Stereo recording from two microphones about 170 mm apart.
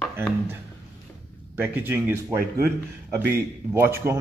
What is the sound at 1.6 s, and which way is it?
A man's voice, 10° right (ahead or behind).